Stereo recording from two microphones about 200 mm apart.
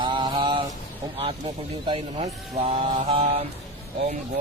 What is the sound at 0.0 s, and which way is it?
Mantra, 25° right (ahead or behind).